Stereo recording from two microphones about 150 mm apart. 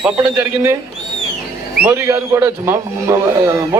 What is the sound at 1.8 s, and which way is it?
A man's voice, 20° right (ahead or behind).